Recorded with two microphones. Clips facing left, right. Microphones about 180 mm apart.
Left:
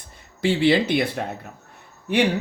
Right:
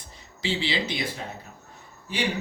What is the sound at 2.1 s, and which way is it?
Speech, 65° left (ahead or behind).